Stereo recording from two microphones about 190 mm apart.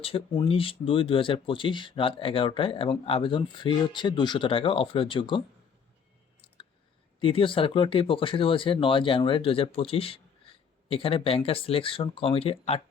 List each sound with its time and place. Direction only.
0.0 s speech: 25° left (ahead or behind)
7.2 s speech: 30° left (ahead or behind)